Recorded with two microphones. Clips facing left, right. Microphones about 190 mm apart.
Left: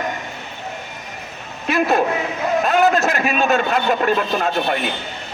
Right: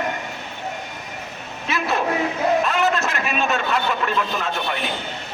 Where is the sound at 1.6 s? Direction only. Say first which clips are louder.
Left 5 dB; 45° left (ahead or behind).